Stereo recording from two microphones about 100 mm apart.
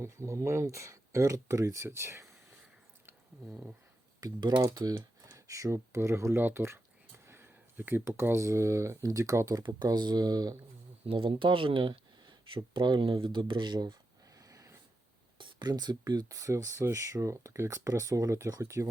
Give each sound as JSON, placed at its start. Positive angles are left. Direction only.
{"t": 0.0, "sound": "speech", "side_deg": -30}
{"t": 4.2, "sound": "speech", "side_deg": -45}
{"t": 9.6, "sound": "speech", "side_deg": -45}
{"t": 11.0, "sound": "speech", "side_deg": -65}
{"t": 14.3, "sound": "a sound", "side_deg": -35}
{"t": 15.4, "sound": "speech", "side_deg": -50}